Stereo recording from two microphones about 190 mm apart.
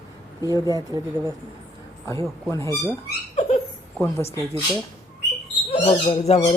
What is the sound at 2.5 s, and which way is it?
Speech, 15° left (ahead or behind).